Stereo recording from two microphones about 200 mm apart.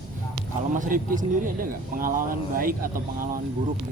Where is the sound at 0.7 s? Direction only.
40° right (ahead or behind).